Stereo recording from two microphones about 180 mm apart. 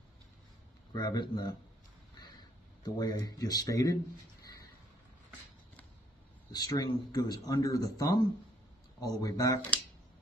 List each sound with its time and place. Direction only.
0.9 s speech: 25° left (ahead or behind)
2.8 s speech: 20° left (ahead or behind)
6.5 s speech: 20° left (ahead or behind)